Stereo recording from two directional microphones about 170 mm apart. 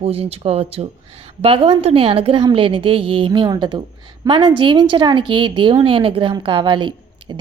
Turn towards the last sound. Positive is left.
turn(degrees=-25)  # may be behind; listen again after turning